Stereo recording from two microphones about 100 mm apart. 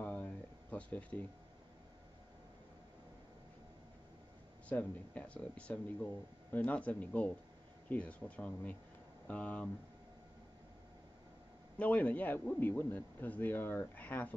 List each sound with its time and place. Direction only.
0.0 s a sound: 20° left (ahead or behind)
4.6 s speech: 15° left (ahead or behind)
11.7 s a man's voice: 15° left (ahead or behind)